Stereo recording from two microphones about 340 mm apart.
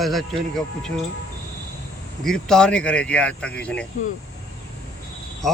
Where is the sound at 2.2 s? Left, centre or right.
Centre.